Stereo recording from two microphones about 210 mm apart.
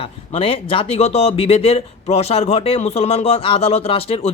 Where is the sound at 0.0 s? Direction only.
25° left (ahead or behind).